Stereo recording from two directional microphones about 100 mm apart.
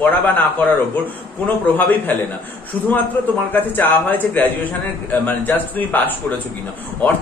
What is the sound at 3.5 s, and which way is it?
A man's voice, 20° left (ahead or behind).